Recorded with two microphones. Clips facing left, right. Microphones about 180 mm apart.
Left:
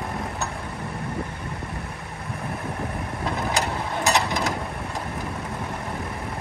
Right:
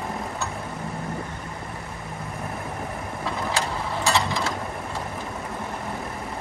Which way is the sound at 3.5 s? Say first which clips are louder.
Left 1 dB; 20° left (ahead or behind).